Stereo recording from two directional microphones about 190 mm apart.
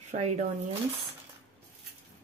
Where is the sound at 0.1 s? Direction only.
45° right (ahead or behind).